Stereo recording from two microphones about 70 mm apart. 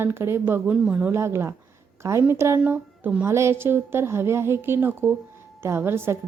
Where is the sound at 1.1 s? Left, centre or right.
Right.